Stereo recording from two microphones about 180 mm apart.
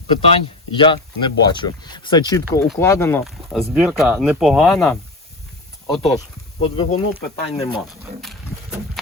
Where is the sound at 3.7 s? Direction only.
5° right (ahead or behind).